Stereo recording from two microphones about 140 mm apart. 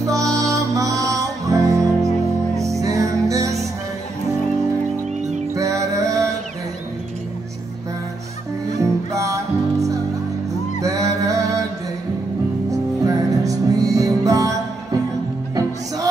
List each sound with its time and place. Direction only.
0.0 s music: 25° right (ahead or behind)
5.5 s music: 20° right (ahead or behind)
8.6 s music: 25° right (ahead or behind)
13.0 s music: 25° right (ahead or behind)